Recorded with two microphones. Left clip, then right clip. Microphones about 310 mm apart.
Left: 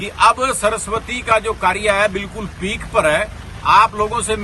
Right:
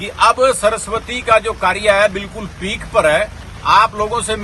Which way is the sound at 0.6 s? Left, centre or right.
Centre.